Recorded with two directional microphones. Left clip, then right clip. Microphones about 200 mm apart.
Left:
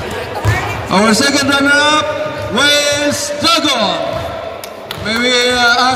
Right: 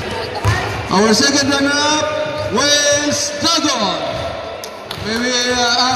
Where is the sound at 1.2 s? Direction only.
20° left (ahead or behind).